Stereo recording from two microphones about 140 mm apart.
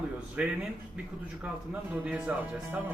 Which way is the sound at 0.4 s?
10° right (ahead or behind).